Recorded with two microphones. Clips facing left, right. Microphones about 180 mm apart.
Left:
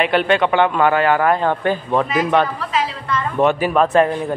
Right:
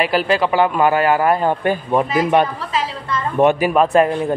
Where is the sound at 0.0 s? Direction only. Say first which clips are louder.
Left 1 dB; 5° right (ahead or behind).